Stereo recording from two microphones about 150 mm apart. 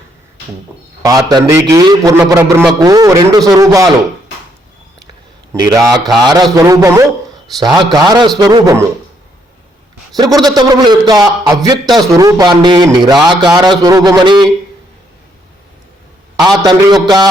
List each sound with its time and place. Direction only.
1.0 s a man's voice: 25° right (ahead or behind)
2.4 s a man's voice: 15° right (ahead or behind)
5.6 s a man's voice: 20° right (ahead or behind)
10.2 s a man's voice: 25° right (ahead or behind)
16.4 s a man's voice: 30° right (ahead or behind)